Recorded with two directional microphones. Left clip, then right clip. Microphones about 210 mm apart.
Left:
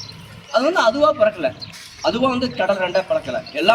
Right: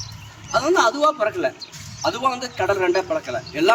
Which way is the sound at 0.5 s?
15° right (ahead or behind).